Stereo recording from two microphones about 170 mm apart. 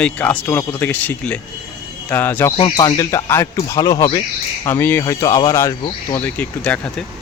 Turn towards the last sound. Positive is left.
turn(degrees=5)  # may be behind; listen again after turning